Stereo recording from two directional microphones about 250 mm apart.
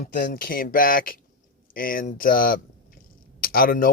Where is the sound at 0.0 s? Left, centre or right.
Left.